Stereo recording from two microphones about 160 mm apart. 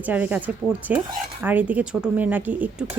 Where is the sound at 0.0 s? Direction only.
10° right (ahead or behind).